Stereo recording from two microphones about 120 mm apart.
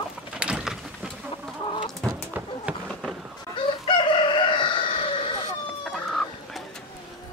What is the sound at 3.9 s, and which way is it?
Chicken, 40° left (ahead or behind).